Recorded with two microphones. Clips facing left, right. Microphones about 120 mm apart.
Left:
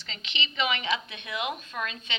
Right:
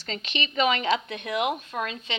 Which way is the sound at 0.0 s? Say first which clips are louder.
Right 5 dB; 45° right (ahead or behind).